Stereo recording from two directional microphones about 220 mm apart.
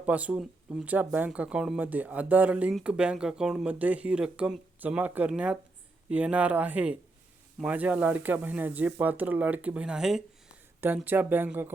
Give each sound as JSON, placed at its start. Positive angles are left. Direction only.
{"t": 0.0, "sound": "speech", "side_deg": -5}